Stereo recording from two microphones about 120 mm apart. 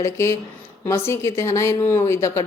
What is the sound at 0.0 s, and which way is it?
Speech, 25° left (ahead or behind).